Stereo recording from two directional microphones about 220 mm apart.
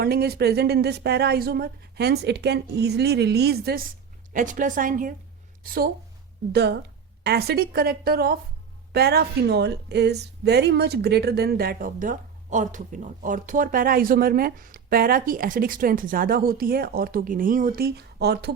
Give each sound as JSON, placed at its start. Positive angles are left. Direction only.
{"t": 0.0, "sound": "a woman's voice", "side_deg": -45}